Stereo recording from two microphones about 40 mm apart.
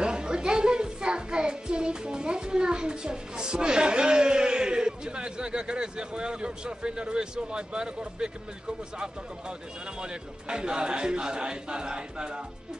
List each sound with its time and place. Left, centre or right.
0.0 s a child's voice: right